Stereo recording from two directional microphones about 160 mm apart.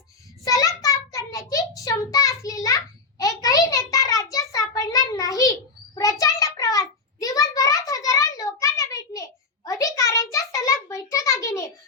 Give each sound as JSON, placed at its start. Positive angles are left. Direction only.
{"t": 0.4, "sound": "child singing", "side_deg": 20}